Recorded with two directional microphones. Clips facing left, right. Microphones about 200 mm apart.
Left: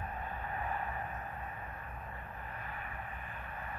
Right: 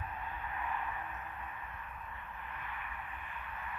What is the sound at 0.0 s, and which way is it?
Vehicle, 40° left (ahead or behind).